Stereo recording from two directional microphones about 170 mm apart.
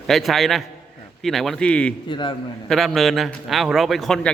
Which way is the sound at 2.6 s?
Centre (ahead or behind).